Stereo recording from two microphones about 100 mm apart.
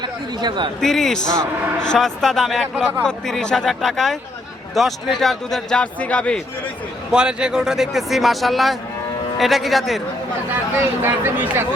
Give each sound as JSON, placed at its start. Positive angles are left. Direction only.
{"t": 0.0, "sound": "chatter", "side_deg": -50}
{"t": 0.8, "sound": "a man's voice", "side_deg": 5}
{"t": 7.1, "sound": "a man's voice", "side_deg": -10}
{"t": 11.0, "sound": "speech", "side_deg": -25}